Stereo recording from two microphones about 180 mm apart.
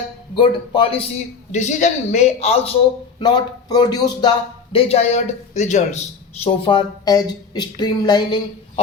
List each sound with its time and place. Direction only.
0.3 s a woman's voice: 25° left (ahead or behind)
1.5 s speech: 40° left (ahead or behind)
3.2 s a woman's voice: 25° left (ahead or behind); by 6.0 s 40° left (ahead or behind)
6.4 s a woman's voice: 30° left (ahead or behind)